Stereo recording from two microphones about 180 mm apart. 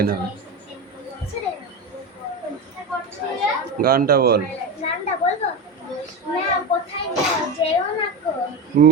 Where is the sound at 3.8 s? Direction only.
55° right (ahead or behind).